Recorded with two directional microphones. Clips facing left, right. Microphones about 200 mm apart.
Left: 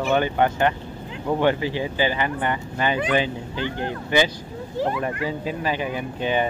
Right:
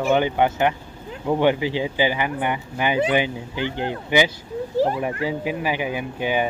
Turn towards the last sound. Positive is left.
turn(degrees=-10)  # may be behind; listen again after turning